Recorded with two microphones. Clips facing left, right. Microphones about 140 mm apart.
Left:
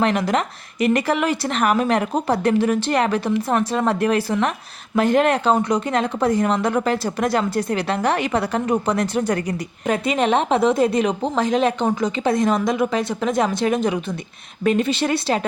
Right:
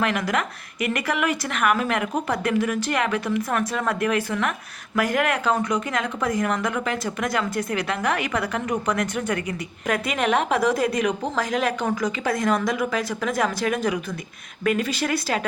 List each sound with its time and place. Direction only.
0.0 s a woman's voice: 30° left (ahead or behind)